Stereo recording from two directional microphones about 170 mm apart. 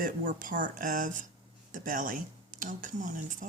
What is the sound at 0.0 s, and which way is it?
Speech, 55° right (ahead or behind).